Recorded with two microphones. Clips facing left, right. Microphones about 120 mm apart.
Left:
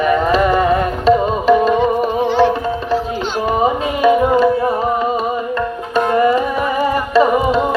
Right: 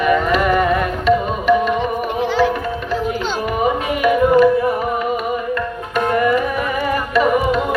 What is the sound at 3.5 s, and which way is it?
Music, 30° left (ahead or behind).